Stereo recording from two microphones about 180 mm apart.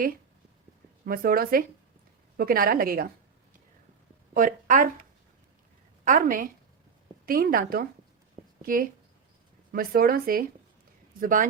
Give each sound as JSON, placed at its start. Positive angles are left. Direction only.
{"t": 1.0, "sound": "a woman's voice", "side_deg": -55}
{"t": 4.4, "sound": "speech", "side_deg": -50}
{"t": 6.1, "sound": "a woman's voice", "side_deg": -50}